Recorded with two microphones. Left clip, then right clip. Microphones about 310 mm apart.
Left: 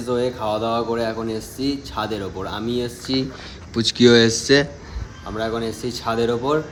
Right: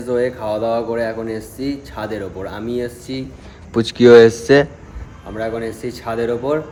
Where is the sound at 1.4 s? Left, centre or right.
Centre.